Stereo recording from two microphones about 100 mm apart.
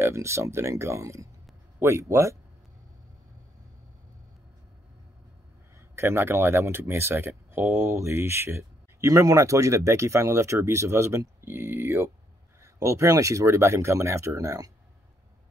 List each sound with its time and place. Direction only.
0.0 s speech: 30° right (ahead or behind)
5.9 s speech: 25° right (ahead or behind)